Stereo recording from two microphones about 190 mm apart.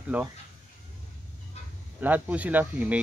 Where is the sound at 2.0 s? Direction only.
10° right (ahead or behind).